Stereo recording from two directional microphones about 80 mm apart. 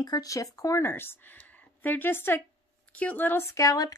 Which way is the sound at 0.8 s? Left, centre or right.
Left.